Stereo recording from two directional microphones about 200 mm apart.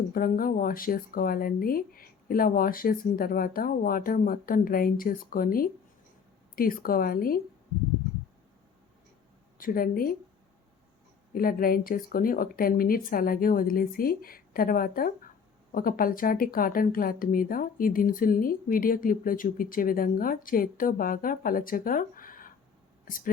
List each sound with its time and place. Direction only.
0.1 s speech: 45° left (ahead or behind)
9.6 s speech: 45° left (ahead or behind)
11.3 s speech: 45° left (ahead or behind)